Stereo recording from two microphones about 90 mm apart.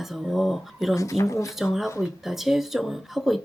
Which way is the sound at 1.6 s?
Centre (ahead or behind).